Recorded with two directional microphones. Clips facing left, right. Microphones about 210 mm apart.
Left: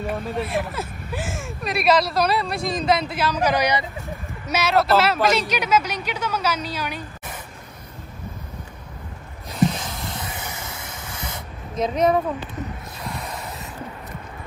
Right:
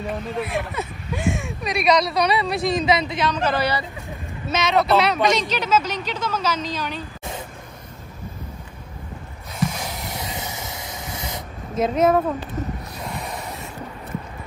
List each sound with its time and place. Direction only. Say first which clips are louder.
0.0 s speech: left 1 dB; centre (ahead or behind); by 3.8 s 15° left (ahead or behind)
4.5 s speech: even; 5° left (ahead or behind)
10.2 s spray: right 2 dB; 20° right (ahead or behind)
11.7 s speech: right 2 dB; 5° right (ahead or behind)